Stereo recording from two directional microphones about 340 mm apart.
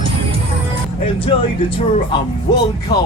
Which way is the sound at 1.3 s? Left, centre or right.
Centre.